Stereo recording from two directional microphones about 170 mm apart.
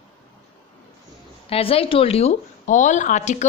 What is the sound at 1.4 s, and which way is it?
Speech, 35° left (ahead or behind).